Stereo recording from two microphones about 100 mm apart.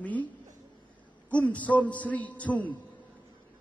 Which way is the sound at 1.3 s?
15° left (ahead or behind).